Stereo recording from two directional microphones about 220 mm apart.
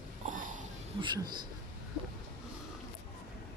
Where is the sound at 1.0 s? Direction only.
20° right (ahead or behind).